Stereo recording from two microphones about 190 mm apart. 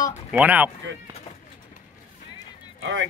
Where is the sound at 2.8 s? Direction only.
90° right.